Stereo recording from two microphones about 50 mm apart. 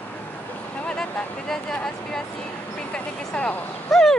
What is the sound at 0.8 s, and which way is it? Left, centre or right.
Vehicle, centre.